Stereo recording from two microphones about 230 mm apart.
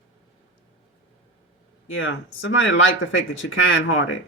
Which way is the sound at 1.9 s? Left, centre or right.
Left.